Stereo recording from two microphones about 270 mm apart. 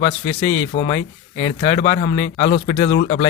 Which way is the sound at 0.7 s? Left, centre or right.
Left.